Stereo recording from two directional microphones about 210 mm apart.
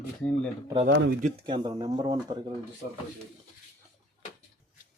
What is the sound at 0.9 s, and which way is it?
Speech, 55° right (ahead or behind).